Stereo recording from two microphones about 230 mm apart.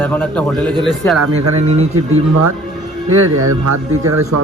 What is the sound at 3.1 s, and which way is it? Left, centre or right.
Speech, right.